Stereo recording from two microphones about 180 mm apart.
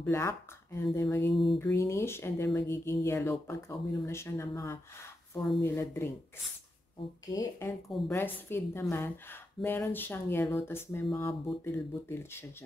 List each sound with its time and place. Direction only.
0.0 s speech: 15° left (ahead or behind)
7.3 s speech: 15° left (ahead or behind)